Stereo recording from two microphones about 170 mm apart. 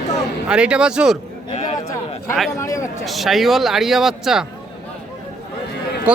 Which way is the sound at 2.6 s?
15° left (ahead or behind).